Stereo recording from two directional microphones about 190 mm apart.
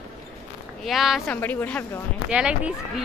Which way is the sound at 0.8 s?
Centre (ahead or behind).